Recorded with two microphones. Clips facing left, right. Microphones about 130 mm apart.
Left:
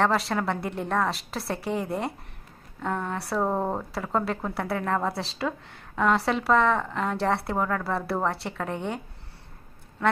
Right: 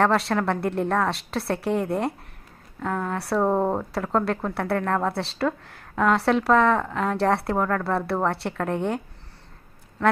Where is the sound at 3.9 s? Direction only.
Centre (ahead or behind).